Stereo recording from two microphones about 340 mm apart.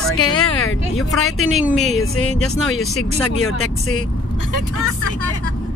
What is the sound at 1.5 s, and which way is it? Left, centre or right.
Speech, centre.